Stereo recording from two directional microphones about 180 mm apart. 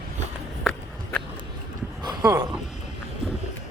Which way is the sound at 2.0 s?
20° right (ahead or behind).